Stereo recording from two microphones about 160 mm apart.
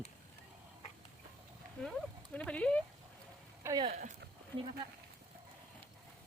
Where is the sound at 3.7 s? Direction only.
15° right (ahead or behind).